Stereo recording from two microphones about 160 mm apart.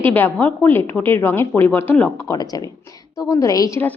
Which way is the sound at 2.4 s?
25° left (ahead or behind).